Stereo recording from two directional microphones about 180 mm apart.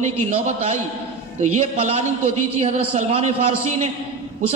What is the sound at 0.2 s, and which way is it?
A man's voice, 40° right (ahead or behind).